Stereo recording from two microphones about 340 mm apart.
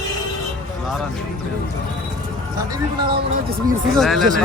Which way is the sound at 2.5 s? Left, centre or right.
Centre.